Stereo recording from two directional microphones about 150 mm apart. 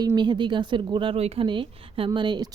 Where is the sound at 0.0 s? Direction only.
30° right (ahead or behind).